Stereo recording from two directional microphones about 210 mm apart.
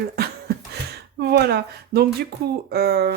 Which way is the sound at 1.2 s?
50° right (ahead or behind).